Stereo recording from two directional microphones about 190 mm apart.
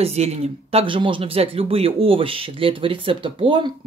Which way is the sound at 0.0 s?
35° right (ahead or behind).